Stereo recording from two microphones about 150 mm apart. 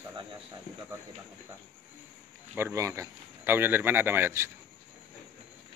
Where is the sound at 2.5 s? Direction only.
15° right (ahead or behind).